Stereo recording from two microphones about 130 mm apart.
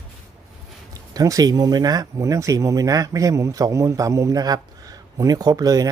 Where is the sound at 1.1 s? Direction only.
25° right (ahead or behind).